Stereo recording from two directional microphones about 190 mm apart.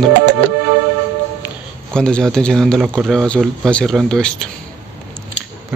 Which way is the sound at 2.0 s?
5° left (ahead or behind).